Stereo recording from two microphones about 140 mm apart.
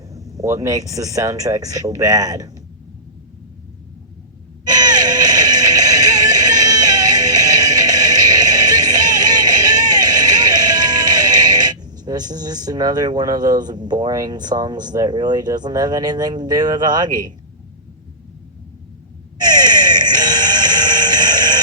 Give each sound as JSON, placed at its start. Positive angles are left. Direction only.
{"t": 0.1, "sound": "speech", "side_deg": -25}
{"t": 4.6, "sound": "music", "side_deg": -30}
{"t": 19.4, "sound": "music", "side_deg": -30}